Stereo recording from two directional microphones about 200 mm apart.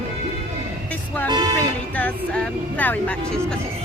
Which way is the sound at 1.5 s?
10° left (ahead or behind).